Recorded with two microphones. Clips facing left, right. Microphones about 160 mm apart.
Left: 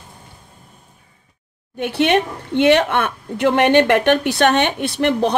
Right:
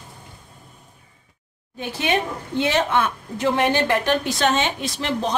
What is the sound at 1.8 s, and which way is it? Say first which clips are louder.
A woman's voice: left 7 dB; 65° left (ahead or behind).